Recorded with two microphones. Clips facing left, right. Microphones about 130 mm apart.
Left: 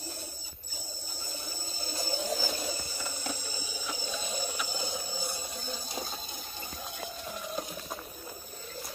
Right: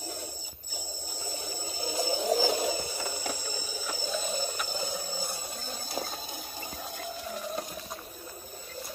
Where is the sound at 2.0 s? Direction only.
50° right (ahead or behind).